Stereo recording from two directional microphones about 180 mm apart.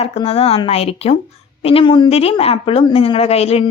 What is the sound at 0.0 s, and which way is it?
A woman's voice, 35° left (ahead or behind).